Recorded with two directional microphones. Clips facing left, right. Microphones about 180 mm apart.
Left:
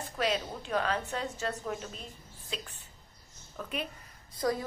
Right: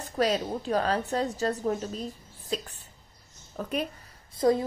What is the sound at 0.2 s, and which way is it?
A woman's voice, 40° right (ahead or behind).